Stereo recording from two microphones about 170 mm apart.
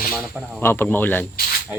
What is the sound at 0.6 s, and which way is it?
Speech, 15° left (ahead or behind).